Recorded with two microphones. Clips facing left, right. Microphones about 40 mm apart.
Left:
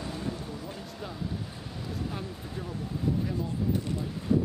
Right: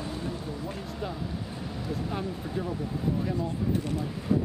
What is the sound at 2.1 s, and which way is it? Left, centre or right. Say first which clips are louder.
Speech: right 5 dB; centre.